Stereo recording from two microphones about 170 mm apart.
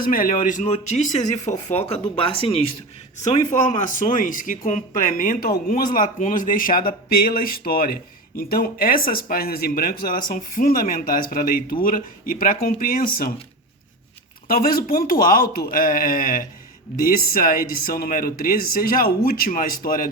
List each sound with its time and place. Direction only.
0.0 s speech: 55° left (ahead or behind)
14.4 s speech: 60° left (ahead or behind)